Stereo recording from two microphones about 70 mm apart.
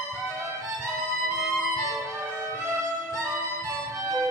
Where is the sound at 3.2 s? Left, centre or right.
Right.